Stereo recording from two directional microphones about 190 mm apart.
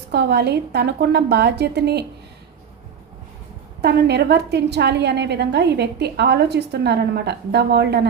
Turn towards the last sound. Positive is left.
turn(degrees=-60)  # may be behind; listen again after turning